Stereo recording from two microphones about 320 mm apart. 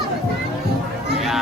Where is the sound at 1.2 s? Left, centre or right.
Centre.